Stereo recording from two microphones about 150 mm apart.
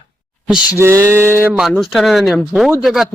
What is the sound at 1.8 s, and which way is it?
Speech, centre (ahead or behind).